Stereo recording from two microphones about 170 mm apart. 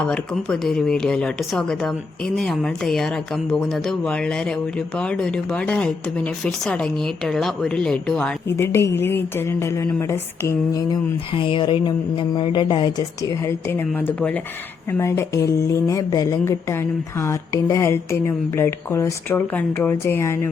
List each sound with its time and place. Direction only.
0.0 s speech: 5° left (ahead or behind)
8.5 s a woman's voice: 15° left (ahead or behind)
11.3 s a woman's voice: 30° left (ahead or behind)